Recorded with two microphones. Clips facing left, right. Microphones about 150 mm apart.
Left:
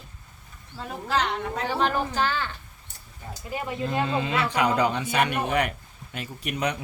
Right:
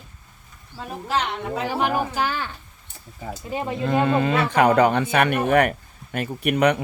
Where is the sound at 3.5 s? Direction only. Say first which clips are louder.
Right 4 dB; 25° right (ahead or behind).